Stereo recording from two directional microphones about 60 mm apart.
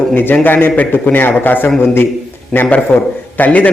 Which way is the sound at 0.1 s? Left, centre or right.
Left.